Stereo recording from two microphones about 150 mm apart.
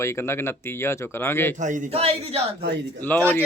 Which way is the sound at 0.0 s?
15° left (ahead or behind).